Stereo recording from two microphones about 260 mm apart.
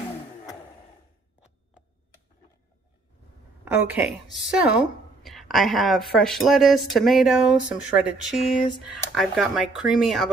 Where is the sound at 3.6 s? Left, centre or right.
Centre.